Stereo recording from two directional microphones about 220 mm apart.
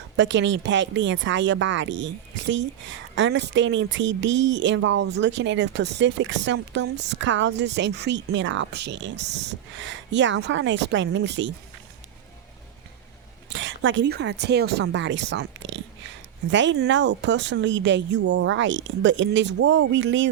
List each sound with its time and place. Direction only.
0.2 s speech: 55° right (ahead or behind)
13.5 s speech: 55° right (ahead or behind)
18.3 s speech: 70° right (ahead or behind)